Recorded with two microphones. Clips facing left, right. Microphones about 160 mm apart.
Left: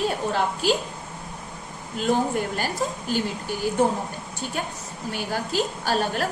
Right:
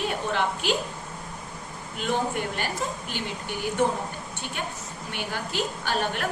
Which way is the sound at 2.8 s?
40° left (ahead or behind).